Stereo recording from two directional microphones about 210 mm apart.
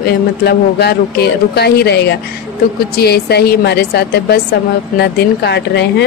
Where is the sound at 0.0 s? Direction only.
50° left (ahead or behind).